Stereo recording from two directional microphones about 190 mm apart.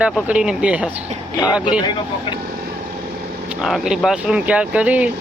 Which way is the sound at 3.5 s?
Centre (ahead or behind).